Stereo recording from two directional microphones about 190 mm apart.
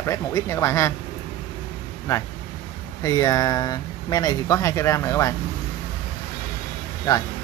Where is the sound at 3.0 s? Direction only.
15° left (ahead or behind).